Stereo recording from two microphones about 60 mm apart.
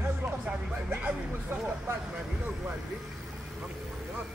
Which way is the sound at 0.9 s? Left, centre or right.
Right.